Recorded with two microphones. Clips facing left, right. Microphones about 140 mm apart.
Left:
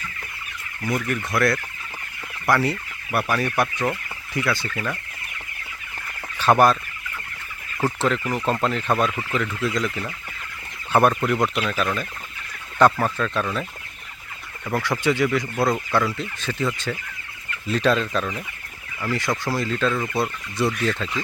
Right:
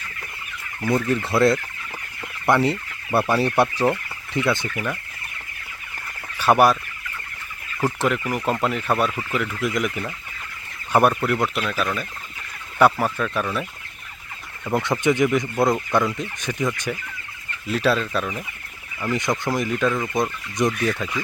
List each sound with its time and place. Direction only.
0.9 s speech: 25° right (ahead or behind)
6.4 s speech: 10° right (ahead or behind)
7.8 s speech: 10° right (ahead or behind)
14.6 s speech: 20° right (ahead or behind)
19.0 s speech: 20° right (ahead or behind)